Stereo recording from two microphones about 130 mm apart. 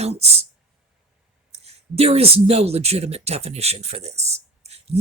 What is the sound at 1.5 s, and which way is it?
Speech, 55° right (ahead or behind).